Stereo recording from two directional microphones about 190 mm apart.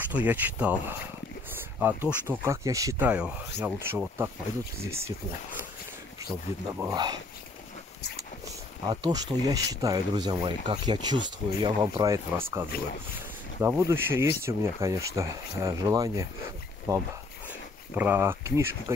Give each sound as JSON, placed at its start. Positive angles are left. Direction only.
{"t": 0.1, "sound": "speech", "side_deg": -10}
{"t": 6.8, "sound": "speech", "side_deg": -20}
{"t": 8.8, "sound": "speech", "side_deg": -20}